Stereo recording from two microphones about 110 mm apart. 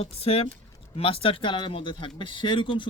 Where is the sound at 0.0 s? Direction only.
65° left (ahead or behind).